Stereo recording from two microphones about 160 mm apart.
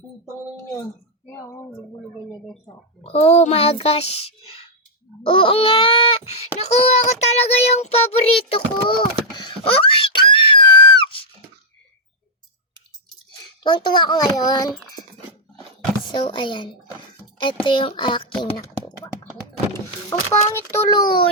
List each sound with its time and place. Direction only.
1.4 s a child's voice: 20° left (ahead or behind)
3.0 s a child's voice: 40° left (ahead or behind)
13.6 s a child's voice: 30° left (ahead or behind)
16.0 s a child's voice: 30° left (ahead or behind)
20.5 s a child's voice: 15° left (ahead or behind)
20.9 s a child's voice: 25° left (ahead or behind)